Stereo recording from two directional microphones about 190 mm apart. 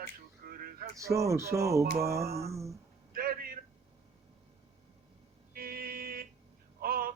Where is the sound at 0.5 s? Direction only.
50° right (ahead or behind).